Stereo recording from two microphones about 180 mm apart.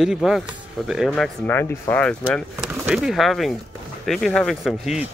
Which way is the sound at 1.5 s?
10° left (ahead or behind).